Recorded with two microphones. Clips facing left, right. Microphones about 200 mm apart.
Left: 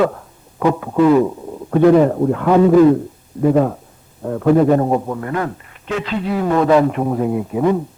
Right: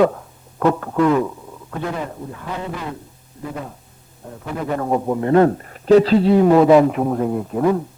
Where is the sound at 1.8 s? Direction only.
65° left (ahead or behind).